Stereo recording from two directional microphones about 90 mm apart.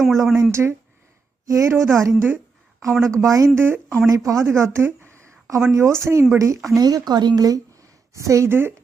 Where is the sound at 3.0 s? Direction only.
35° right (ahead or behind).